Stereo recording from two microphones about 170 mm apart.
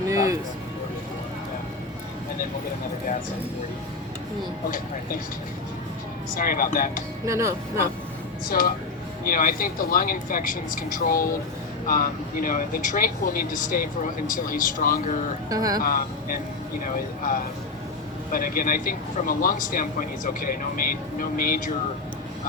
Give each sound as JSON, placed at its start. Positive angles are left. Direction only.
{"t": 6.3, "sound": "a man's voice", "side_deg": 55}
{"t": 7.3, "sound": "speech", "side_deg": -15}
{"t": 8.4, "sound": "a man's voice", "side_deg": 60}
{"t": 15.4, "sound": "speech", "side_deg": -20}
{"t": 15.8, "sound": "a man's voice", "side_deg": 55}